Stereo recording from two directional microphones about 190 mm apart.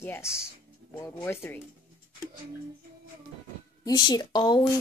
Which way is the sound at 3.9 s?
20° left (ahead or behind).